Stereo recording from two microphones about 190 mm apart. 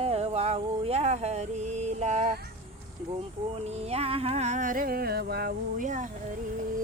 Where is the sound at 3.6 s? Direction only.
35° right (ahead or behind).